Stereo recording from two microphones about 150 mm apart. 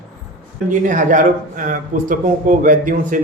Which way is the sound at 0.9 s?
60° right (ahead or behind).